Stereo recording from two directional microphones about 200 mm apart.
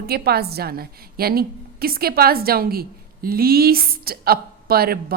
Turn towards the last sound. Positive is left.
turn(degrees=-50)  # may be behind; listen again after turning